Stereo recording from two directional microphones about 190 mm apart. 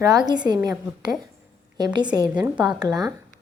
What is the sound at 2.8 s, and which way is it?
Speech, 20° right (ahead or behind).